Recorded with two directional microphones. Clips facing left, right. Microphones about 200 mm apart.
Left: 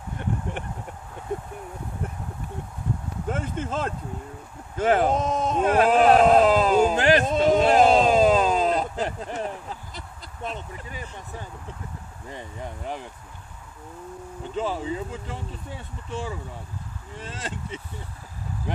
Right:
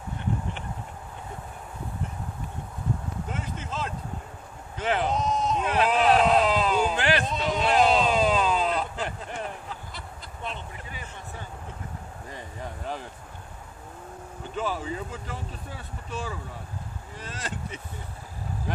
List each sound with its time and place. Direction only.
3.3 s a sound: 50° left (ahead or behind)
12.3 s vehicle: 20° left (ahead or behind)
14.5 s speech: 25° left (ahead or behind)